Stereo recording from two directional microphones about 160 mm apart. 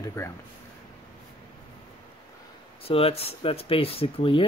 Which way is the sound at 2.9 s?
35° left (ahead or behind).